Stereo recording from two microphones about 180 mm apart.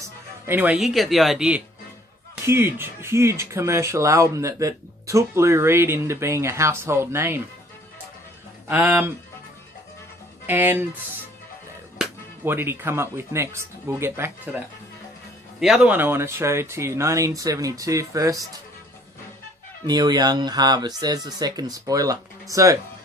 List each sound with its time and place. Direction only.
0.4 s speech: 10° right (ahead or behind)
8.6 s speech: 10° right (ahead or behind)
10.4 s speech: 10° right (ahead or behind)
12.5 s speech: 10° right (ahead or behind)
15.6 s speech: 5° right (ahead or behind)
19.9 s speech: 20° right (ahead or behind)